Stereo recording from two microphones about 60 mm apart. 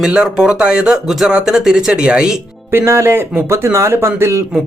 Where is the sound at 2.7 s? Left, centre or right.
Right.